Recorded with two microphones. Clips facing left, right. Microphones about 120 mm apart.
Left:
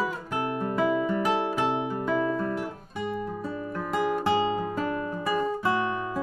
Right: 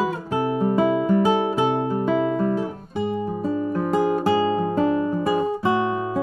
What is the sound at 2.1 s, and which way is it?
Guitar, 15° right (ahead or behind).